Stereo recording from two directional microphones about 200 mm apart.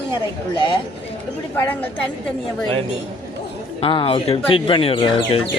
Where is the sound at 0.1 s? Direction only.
25° left (ahead or behind).